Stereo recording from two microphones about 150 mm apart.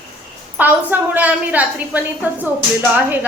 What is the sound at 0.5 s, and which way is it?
A woman's voice, 10° right (ahead or behind).